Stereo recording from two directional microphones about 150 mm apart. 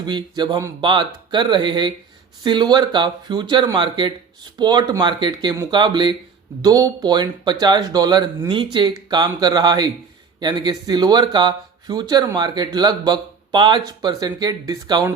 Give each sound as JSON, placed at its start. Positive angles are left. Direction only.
{"t": 0.0, "sound": "speech", "side_deg": -30}